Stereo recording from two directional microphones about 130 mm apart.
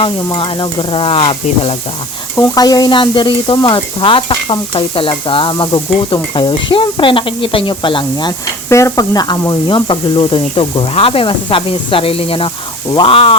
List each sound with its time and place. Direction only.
0.0 s sizzle: 40° left (ahead or behind)
2.3 s sizzle: 30° left (ahead or behind)
8.7 s speech: 25° left (ahead or behind); by 13.3 s 45° left (ahead or behind)